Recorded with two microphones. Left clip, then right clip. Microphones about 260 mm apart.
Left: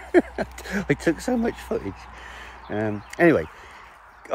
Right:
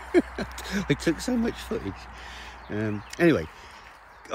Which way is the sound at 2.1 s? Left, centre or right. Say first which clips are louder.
Left 1 dB; centre.